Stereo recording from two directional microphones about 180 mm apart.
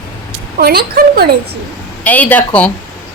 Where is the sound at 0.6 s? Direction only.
60° right (ahead or behind).